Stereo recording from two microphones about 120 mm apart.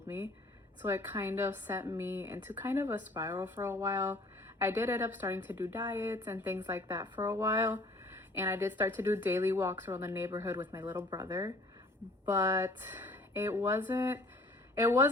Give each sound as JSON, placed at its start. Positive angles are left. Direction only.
{"t": 0.8, "sound": "a woman's voice", "side_deg": -15}
{"t": 11.1, "sound": "speech", "side_deg": -35}
{"t": 12.2, "sound": "speech", "side_deg": -20}